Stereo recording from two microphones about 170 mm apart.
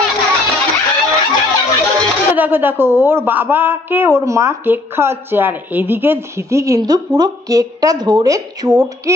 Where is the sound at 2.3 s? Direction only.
10° right (ahead or behind).